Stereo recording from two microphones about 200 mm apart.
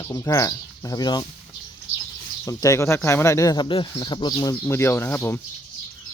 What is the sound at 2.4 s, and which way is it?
Speech, 15° left (ahead or behind).